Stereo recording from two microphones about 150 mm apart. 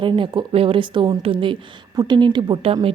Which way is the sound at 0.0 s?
35° right (ahead or behind).